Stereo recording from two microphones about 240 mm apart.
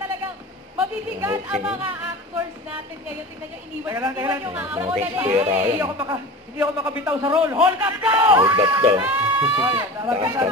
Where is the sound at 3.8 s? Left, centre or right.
Centre.